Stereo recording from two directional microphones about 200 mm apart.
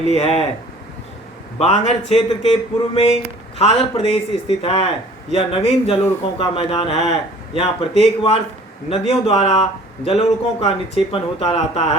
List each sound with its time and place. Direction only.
0.0 s speech: 30° left (ahead or behind)
1.5 s speech: 35° left (ahead or behind)